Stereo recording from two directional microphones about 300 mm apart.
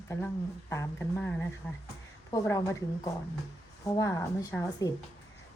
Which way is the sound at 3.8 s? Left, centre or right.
Centre.